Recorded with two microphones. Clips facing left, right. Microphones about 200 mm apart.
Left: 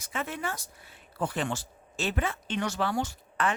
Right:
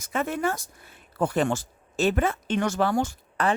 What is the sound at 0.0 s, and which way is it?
Speech, 45° right (ahead or behind).